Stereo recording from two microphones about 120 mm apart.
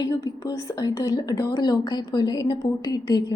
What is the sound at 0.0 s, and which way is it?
A woman's voice, 30° left (ahead or behind).